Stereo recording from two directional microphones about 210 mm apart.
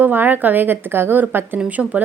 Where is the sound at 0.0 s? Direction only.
10° right (ahead or behind).